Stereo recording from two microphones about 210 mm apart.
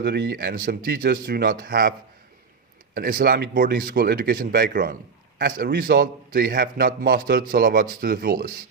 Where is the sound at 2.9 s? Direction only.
45° right (ahead or behind).